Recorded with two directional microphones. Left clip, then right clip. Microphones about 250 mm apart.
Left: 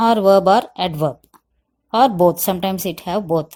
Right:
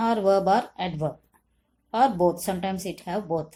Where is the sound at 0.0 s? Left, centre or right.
Left.